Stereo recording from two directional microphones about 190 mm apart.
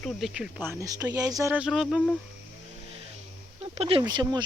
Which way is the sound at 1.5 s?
5° right (ahead or behind).